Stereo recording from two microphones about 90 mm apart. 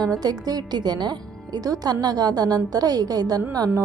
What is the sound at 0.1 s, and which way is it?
A woman's voice, 45° right (ahead or behind).